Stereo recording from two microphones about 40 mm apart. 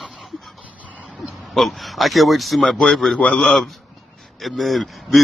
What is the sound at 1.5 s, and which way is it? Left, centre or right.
Speech, centre.